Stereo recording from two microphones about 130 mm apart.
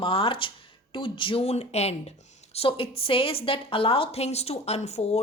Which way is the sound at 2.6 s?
45° left (ahead or behind).